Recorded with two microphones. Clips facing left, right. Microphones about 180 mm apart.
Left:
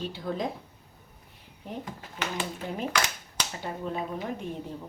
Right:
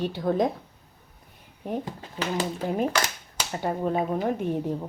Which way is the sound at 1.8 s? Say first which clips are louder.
Right 4 dB; 35° right (ahead or behind).